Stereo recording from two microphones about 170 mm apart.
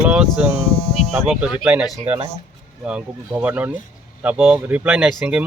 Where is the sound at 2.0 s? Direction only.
35° right (ahead or behind).